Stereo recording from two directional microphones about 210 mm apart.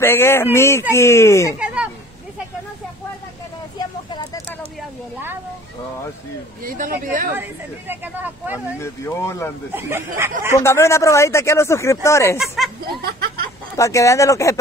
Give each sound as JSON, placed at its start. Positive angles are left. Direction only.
{"t": 0.0, "sound": "speech", "side_deg": 10}
{"t": 6.6, "sound": "speech", "side_deg": -40}
{"t": 7.9, "sound": "speech", "side_deg": -10}
{"t": 8.7, "sound": "speech", "side_deg": 15}
{"t": 9.7, "sound": "speech", "side_deg": -10}
{"t": 10.6, "sound": "speech", "side_deg": 15}
{"t": 12.4, "sound": "speech", "side_deg": 0}
{"t": 12.8, "sound": "a sound", "side_deg": -45}
{"t": 13.7, "sound": "speech", "side_deg": 15}